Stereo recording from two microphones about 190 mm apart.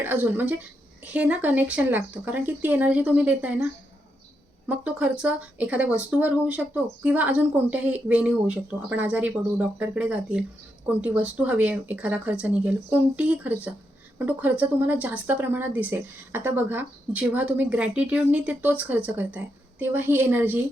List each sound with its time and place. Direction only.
0.0 s speech: 10° right (ahead or behind)